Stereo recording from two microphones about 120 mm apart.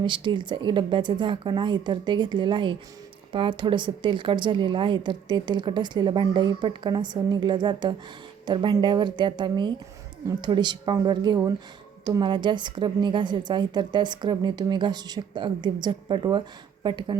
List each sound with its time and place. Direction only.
0.0 s a woman's voice: 40° right (ahead or behind)